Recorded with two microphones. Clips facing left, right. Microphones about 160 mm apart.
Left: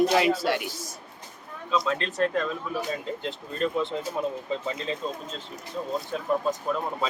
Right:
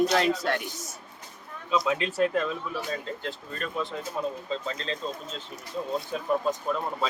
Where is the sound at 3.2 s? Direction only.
20° left (ahead or behind).